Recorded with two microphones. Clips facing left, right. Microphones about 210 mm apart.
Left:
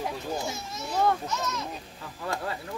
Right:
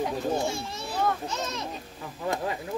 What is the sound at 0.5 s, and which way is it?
A child's voice, 30° right (ahead or behind).